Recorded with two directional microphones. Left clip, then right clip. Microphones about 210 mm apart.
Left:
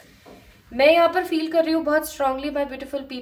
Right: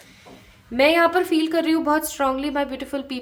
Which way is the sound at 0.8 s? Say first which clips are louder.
Left 1 dB; 35° right (ahead or behind).